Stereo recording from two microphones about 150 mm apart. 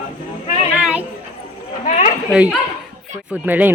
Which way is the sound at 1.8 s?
50° left (ahead or behind).